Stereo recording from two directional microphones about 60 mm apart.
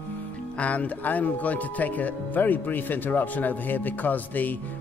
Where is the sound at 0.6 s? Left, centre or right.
Left.